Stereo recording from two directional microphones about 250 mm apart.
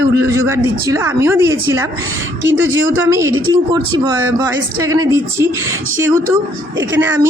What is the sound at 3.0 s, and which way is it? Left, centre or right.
Speech, centre.